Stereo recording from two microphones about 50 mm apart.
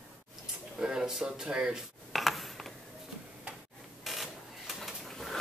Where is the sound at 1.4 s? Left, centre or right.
Centre.